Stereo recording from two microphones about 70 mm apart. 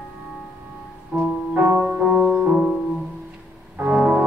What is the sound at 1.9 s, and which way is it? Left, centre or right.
Music, centre.